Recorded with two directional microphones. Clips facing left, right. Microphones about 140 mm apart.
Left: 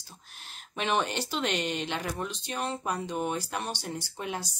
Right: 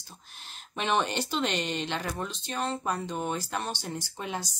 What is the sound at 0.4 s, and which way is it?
Speech, 5° left (ahead or behind).